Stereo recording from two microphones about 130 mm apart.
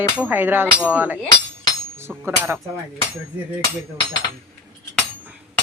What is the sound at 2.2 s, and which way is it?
Speech, 20° right (ahead or behind).